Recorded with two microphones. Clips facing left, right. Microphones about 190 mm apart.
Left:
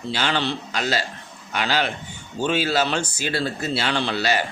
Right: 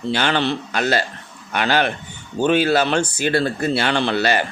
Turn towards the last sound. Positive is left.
turn(degrees=-55)  # may be behind; listen again after turning